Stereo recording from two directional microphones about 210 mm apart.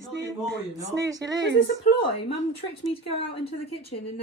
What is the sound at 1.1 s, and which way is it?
Speech, 15° right (ahead or behind).